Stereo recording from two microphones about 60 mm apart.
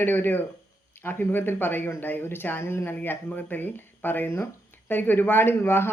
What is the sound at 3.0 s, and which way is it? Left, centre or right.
Speech, left.